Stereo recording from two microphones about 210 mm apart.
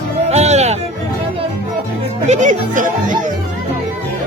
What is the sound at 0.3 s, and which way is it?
Music, 30° right (ahead or behind).